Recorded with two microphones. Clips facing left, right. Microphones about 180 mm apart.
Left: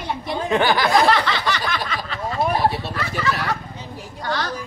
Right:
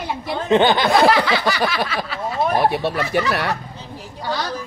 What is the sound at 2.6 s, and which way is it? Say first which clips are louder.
Speech: right 3 dB; 60° right (ahead or behind).